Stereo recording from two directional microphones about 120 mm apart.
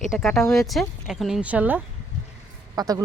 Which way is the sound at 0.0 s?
Centre (ahead or behind).